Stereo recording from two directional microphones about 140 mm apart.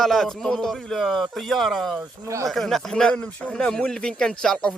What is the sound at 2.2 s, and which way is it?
Speech, 20° right (ahead or behind).